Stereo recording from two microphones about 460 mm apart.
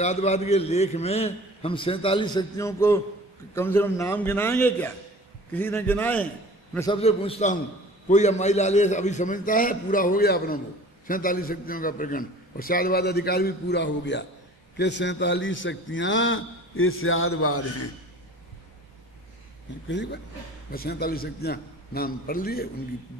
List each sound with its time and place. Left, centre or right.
0.0 s a man's voice: centre
19.9 s a man's voice: left